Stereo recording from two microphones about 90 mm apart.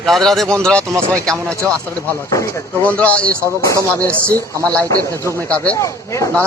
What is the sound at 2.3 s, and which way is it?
Speech, 35° left (ahead or behind).